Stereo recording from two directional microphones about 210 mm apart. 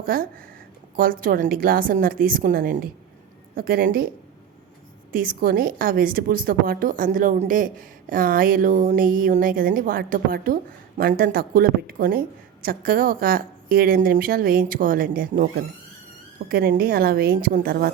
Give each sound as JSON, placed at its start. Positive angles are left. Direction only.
{"t": 0.0, "sound": "a woman's voice", "side_deg": -45}
{"t": 5.1, "sound": "a woman's voice", "side_deg": -45}